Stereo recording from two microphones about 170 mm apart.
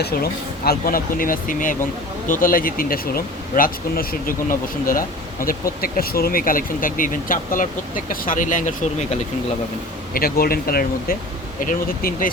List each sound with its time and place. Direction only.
0.0 s speech: 65° left (ahead or behind); by 9.0 s 50° left (ahead or behind)
10.2 s speech: 60° left (ahead or behind)